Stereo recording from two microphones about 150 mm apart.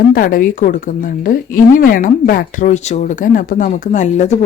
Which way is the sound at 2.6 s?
50° left (ahead or behind).